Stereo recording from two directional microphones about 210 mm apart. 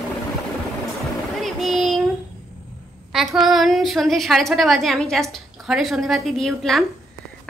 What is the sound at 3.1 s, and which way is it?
A woman's voice, centre (ahead or behind).